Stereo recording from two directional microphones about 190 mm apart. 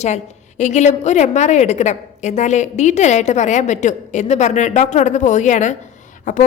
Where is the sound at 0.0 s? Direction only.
35° left (ahead or behind).